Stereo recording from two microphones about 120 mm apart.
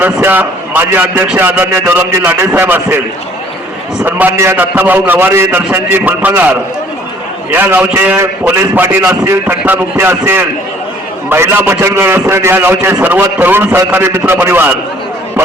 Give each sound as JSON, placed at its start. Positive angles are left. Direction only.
{"t": 0.0, "sound": "a man's voice", "side_deg": -15}
{"t": 4.0, "sound": "a man's voice", "side_deg": -20}